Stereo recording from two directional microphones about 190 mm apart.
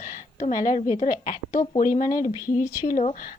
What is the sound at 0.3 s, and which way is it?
A woman's voice, 45° left (ahead or behind).